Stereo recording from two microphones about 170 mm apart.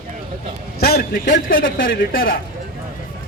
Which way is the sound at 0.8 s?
65° left (ahead or behind).